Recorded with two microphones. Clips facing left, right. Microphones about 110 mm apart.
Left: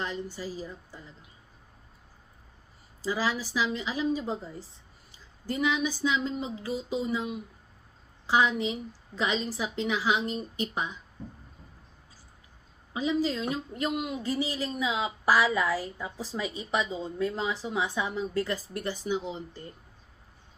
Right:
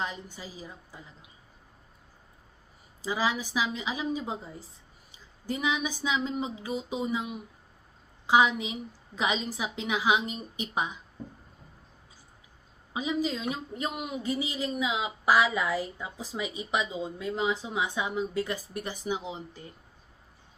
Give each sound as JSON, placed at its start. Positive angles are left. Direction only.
{"t": 0.0, "sound": "speech", "side_deg": -15}
{"t": 3.0, "sound": "speech", "side_deg": -15}
{"t": 8.3, "sound": "speech", "side_deg": -10}
{"t": 12.9, "sound": "speech", "side_deg": -15}